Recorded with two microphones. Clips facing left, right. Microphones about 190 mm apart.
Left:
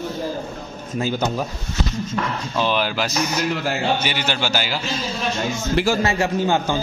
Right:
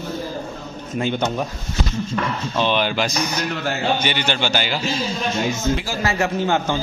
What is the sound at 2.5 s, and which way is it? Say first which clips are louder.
A man's voice: right 1 dB; 5° left (ahead or behind).